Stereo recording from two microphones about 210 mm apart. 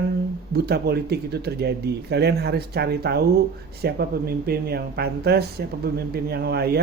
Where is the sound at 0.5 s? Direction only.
50° right (ahead or behind).